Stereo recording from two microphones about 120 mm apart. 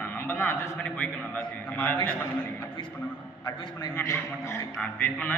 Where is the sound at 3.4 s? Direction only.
35° left (ahead or behind).